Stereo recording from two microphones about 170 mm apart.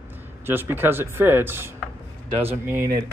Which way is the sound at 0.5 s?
10° right (ahead or behind).